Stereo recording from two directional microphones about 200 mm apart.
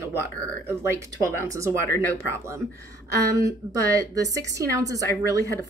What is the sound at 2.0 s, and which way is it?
A woman's voice, 15° right (ahead or behind).